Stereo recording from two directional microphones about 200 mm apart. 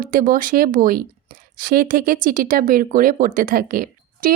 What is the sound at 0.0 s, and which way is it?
A woman's voice, 45° right (ahead or behind).